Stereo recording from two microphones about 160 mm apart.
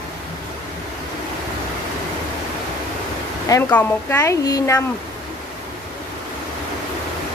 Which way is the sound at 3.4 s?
15° left (ahead or behind).